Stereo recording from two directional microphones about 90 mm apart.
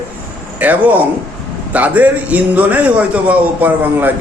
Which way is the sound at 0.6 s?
15° right (ahead or behind).